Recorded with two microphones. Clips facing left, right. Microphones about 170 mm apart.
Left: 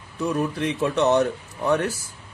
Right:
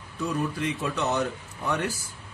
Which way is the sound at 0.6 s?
65° left (ahead or behind).